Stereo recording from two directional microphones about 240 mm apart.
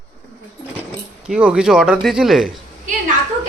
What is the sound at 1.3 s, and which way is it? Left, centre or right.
Speech, centre.